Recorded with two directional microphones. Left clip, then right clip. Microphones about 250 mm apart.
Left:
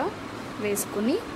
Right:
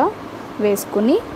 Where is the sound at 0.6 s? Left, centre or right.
Centre.